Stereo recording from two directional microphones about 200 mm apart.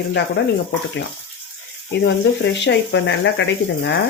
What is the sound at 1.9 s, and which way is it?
Speech, 60° left (ahead or behind).